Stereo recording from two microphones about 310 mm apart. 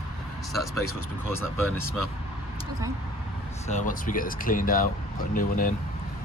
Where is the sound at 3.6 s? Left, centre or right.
Left.